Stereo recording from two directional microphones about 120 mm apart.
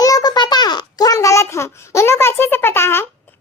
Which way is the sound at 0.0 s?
30° left (ahead or behind).